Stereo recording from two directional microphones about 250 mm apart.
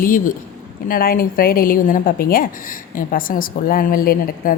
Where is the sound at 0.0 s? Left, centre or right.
Left.